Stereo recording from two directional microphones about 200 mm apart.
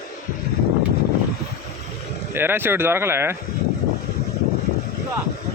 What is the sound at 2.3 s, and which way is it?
Speech, 10° right (ahead or behind).